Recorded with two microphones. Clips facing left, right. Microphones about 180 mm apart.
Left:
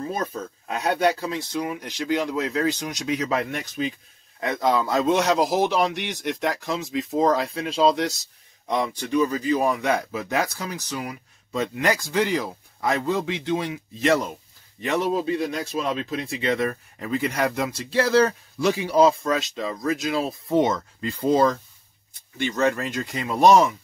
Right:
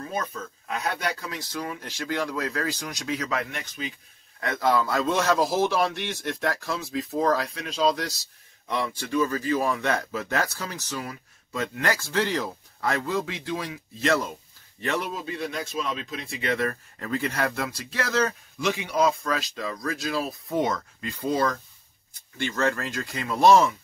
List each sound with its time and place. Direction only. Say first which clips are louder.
0.1 s speech: left 3 dB; 35° left (ahead or behind)
3.3 s speech: left 5 dB; 35° left (ahead or behind)
4.4 s a man's voice: left 1 dB; 20° left (ahead or behind)
15.0 s a man's voice: left 8 dB; 30° left (ahead or behind); by 23.7 s 15° left (ahead or behind)